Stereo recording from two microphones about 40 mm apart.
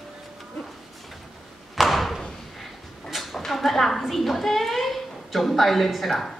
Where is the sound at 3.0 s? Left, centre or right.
Centre.